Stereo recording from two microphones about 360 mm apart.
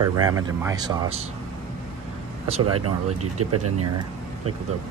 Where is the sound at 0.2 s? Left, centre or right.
Centre.